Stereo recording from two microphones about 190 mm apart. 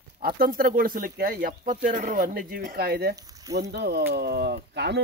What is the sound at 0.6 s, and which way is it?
Speech, 50° right (ahead or behind).